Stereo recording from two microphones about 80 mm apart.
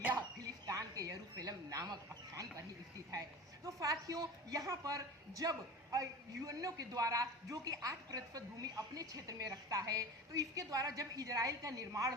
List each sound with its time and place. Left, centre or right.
0.0 s music: right
0.7 s a sound: right
3.1 s a man's voice: right